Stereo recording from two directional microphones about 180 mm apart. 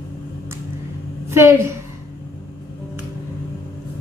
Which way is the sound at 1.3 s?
15° right (ahead or behind).